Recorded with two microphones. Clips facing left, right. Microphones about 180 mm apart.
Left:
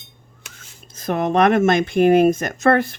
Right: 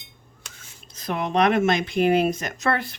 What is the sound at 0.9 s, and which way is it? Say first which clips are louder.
Speech: left 6 dB; 45° left (ahead or behind).